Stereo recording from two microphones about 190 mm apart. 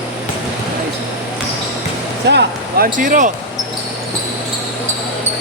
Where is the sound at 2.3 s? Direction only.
60° right (ahead or behind).